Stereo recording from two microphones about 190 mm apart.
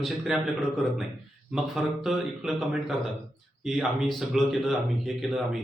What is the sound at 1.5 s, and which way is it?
Speech, centre (ahead or behind).